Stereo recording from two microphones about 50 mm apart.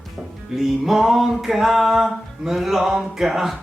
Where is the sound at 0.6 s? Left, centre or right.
Centre.